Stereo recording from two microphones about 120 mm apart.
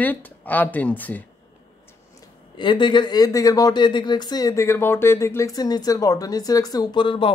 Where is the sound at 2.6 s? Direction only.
40° left (ahead or behind).